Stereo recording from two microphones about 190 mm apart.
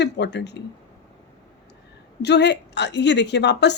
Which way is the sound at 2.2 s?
65° left (ahead or behind).